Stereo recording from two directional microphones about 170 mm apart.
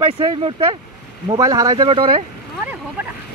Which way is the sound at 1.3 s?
20° right (ahead or behind).